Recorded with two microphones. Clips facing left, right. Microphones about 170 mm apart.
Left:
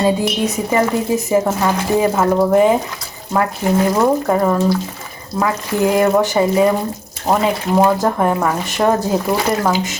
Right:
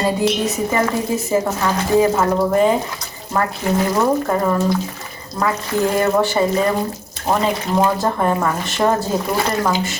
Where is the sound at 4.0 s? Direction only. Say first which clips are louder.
Left 3 dB; 10° left (ahead or behind).